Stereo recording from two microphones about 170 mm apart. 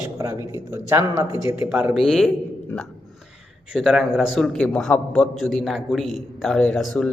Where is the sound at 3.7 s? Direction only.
5° right (ahead or behind).